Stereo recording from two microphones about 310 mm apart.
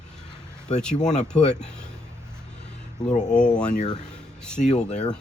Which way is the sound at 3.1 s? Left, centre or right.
Left.